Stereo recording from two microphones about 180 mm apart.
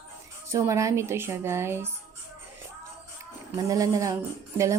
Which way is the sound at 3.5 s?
20° right (ahead or behind).